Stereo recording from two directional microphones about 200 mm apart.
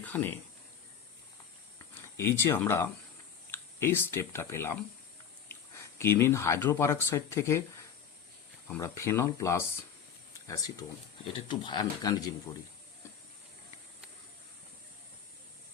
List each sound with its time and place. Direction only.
0.0 s speech: 10° left (ahead or behind)
2.0 s speech: 10° left (ahead or behind)
5.8 s speech: 15° left (ahead or behind)
8.6 s speech: 15° left (ahead or behind)